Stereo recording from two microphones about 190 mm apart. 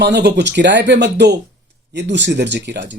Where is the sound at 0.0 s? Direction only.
60° right (ahead or behind).